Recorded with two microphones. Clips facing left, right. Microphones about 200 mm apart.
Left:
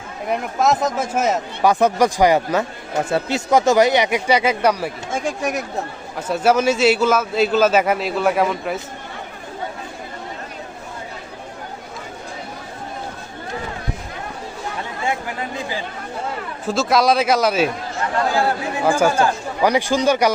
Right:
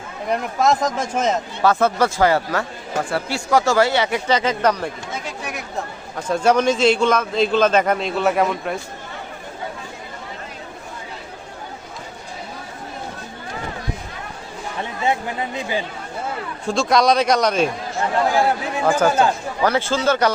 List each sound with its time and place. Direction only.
0.3 s speech: 5° left (ahead or behind)
5.1 s speech: 45° left (ahead or behind)
6.1 s a man's voice: 5° left (ahead or behind)
15.0 s speech: 20° right (ahead or behind)
16.6 s a man's voice: 5° left (ahead or behind)
18.9 s speech: 10° left (ahead or behind)